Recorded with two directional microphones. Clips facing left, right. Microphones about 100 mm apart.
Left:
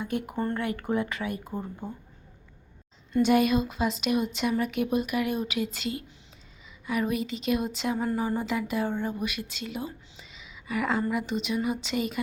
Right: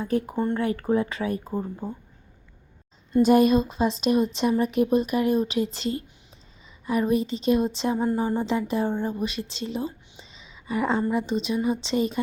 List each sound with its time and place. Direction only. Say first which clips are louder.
0.0 s speech: right 5 dB; 35° right (ahead or behind)
3.1 s speech: right 4 dB; 40° right (ahead or behind)